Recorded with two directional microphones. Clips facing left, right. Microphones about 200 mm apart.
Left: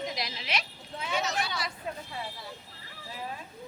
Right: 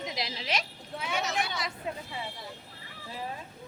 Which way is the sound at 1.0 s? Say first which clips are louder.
Left 1 dB; 5° right (ahead or behind).